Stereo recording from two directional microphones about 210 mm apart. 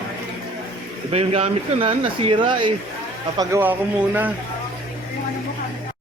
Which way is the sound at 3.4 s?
10° right (ahead or behind).